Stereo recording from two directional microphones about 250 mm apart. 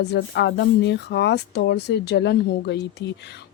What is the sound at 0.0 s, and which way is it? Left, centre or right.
Speech, left.